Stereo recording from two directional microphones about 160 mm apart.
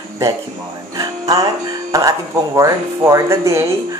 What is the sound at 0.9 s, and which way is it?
Speech, 25° right (ahead or behind).